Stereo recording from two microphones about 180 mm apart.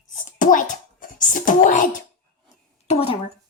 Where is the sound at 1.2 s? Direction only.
45° left (ahead or behind).